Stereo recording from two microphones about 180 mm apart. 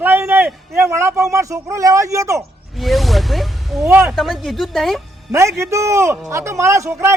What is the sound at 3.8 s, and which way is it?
Speech, 10° right (ahead or behind).